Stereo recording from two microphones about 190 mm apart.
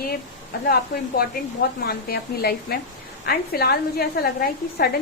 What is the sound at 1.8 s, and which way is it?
A woman's voice, 55° left (ahead or behind).